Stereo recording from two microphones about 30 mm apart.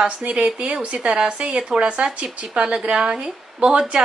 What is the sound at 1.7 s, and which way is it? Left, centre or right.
A woman's voice, right.